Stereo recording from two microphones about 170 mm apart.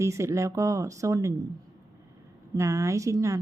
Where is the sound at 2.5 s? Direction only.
20° right (ahead or behind).